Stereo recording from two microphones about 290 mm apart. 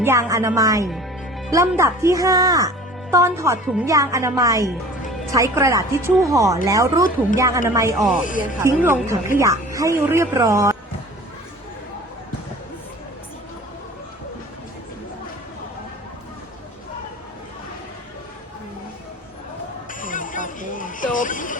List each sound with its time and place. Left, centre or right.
0.0 s speech: centre
8.2 s speech: left
8.6 s speech: centre
19.9 s music: left